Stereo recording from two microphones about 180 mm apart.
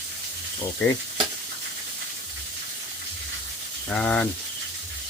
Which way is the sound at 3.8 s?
5° left (ahead or behind).